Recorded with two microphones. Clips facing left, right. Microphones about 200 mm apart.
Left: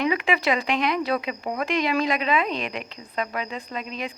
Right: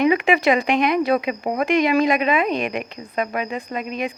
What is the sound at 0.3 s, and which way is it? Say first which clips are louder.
Speech: right 6 dB; 50° right (ahead or behind).